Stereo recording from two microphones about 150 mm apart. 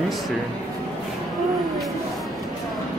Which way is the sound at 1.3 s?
Centre (ahead or behind).